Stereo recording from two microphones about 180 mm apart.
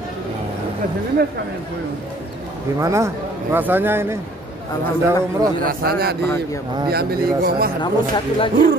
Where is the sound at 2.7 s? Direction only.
15° right (ahead or behind).